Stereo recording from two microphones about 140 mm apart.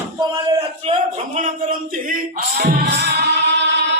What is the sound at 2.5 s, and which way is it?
Music, 90° right.